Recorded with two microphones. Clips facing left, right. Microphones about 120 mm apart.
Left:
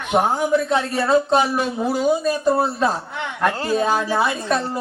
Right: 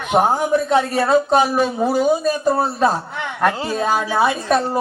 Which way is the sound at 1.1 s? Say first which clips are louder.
Left 1 dB; 15° right (ahead or behind).